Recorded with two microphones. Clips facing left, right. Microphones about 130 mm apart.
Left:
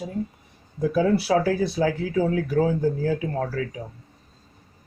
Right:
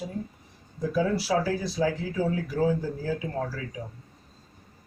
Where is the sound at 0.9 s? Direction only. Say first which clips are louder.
Left 4 dB; 65° left (ahead or behind).